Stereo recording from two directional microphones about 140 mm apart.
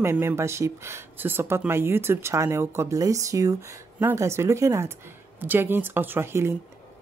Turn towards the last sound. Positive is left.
turn(degrees=-20)  # may be behind; listen again after turning